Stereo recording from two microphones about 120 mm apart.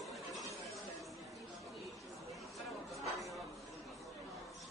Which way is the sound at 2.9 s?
Centre (ahead or behind).